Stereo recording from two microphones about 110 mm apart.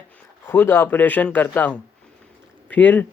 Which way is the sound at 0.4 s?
20° left (ahead or behind).